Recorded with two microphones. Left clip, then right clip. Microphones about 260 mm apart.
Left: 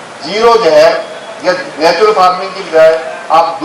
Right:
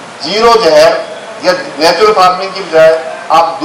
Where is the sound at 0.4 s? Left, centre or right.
Centre.